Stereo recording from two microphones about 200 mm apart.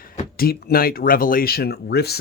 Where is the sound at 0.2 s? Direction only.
50° left (ahead or behind).